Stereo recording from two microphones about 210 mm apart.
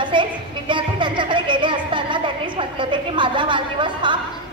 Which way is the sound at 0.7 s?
20° right (ahead or behind).